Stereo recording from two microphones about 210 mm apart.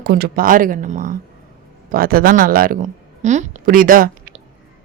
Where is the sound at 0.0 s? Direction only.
45° right (ahead or behind).